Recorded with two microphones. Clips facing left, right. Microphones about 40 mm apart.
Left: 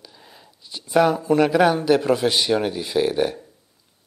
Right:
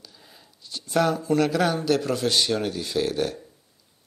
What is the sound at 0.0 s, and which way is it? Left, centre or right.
Speech, centre.